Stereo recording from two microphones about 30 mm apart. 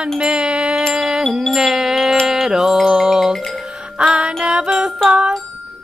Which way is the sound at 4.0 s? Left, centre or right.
Right.